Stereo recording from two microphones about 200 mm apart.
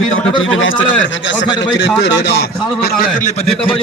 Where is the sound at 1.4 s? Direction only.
60° left (ahead or behind).